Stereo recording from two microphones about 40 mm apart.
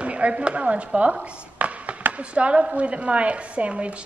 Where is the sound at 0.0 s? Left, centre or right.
Right.